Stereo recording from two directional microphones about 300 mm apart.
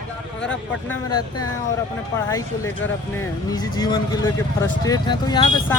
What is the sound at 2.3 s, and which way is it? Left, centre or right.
Speech, centre.